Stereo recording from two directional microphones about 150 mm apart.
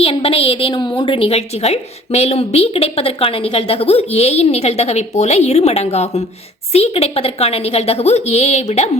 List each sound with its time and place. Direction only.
0.0 s a woman's voice: 40° left (ahead or behind)